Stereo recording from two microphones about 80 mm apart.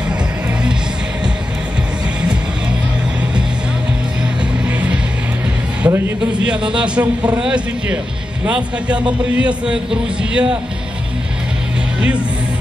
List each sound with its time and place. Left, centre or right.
4.2 s music: centre
5.8 s a sound: right
6.4 s a man's voice: centre